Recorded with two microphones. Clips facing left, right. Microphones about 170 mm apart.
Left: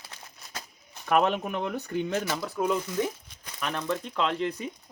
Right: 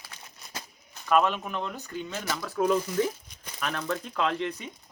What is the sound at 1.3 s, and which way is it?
Speech, 60° left (ahead or behind).